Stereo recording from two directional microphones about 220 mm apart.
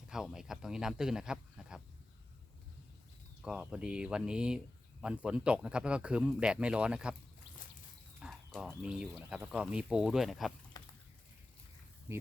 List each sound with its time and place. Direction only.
0.1 s speech: centre (ahead or behind)
3.4 s speech: 5° right (ahead or behind)
8.2 s speech: centre (ahead or behind)
10.8 s a sound: 20° left (ahead or behind)